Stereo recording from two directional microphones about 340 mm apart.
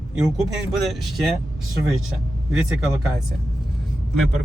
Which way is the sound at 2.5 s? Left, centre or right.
Centre.